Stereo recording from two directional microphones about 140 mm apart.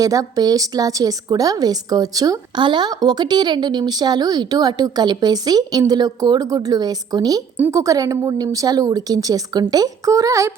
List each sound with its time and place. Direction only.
0.0 s a woman's voice: 25° right (ahead or behind)